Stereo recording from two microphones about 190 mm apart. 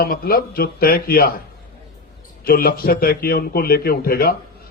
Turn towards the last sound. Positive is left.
turn(degrees=50)  # may be behind; listen again after turning